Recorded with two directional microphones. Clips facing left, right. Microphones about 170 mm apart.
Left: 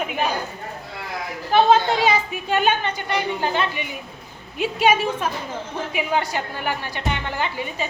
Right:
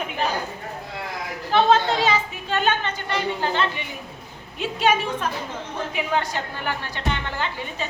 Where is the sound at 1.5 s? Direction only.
10° left (ahead or behind).